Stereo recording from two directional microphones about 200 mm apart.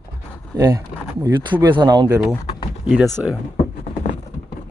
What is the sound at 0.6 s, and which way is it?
Speech, 15° right (ahead or behind).